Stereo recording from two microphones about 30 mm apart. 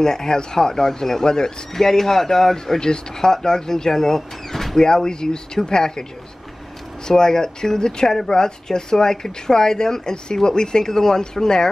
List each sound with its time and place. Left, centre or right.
0.0 s speech: centre
4.7 s speech: left
7.1 s speech: left